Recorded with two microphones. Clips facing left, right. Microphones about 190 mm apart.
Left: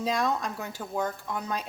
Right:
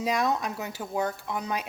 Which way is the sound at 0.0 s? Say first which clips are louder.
Right 1 dB; 10° right (ahead or behind).